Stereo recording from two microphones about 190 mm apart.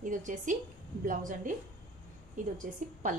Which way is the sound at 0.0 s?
45° right (ahead or behind).